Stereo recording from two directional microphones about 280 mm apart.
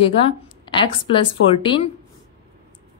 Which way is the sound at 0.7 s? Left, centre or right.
Centre.